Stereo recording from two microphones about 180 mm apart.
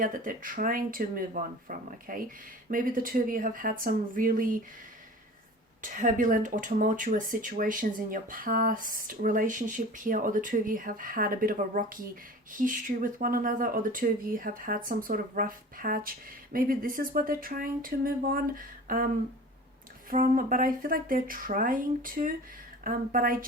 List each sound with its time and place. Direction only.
0.0 s speech: 50° right (ahead or behind)
5.8 s speech: 45° right (ahead or behind)
20.1 s speech: 50° right (ahead or behind)